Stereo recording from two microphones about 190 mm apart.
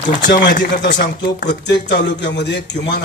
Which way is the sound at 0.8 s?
70° left (ahead or behind).